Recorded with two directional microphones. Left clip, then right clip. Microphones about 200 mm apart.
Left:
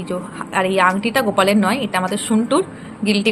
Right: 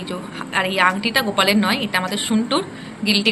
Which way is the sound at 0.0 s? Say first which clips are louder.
Left 3 dB; 45° left (ahead or behind).